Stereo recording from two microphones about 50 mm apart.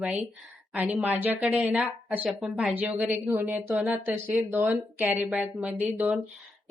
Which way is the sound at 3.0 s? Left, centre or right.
Right.